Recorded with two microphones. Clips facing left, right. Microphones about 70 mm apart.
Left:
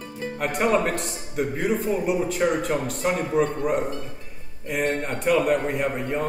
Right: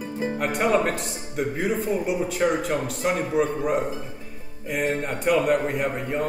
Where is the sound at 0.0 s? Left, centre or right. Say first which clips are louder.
Right 5 dB; centre.